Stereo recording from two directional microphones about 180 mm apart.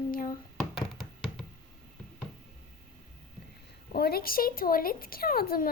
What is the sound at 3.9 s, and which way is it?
Speech, 60° left (ahead or behind).